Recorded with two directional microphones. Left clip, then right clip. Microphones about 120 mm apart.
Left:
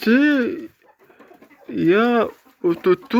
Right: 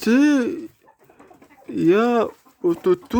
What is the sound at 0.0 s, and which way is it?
Speech, 50° right (ahead or behind).